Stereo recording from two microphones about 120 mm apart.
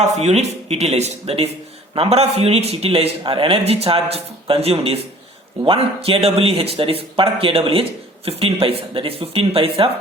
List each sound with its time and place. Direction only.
0.0 s a man's voice: 65° right (ahead or behind); by 9.9 s 50° right (ahead or behind)